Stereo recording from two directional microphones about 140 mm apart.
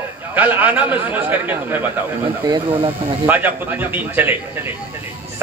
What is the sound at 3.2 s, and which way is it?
A man's voice, 15° right (ahead or behind).